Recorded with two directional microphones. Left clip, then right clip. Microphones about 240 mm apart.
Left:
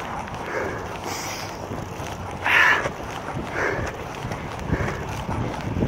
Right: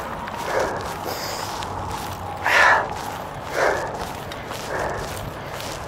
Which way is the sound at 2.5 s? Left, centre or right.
Left.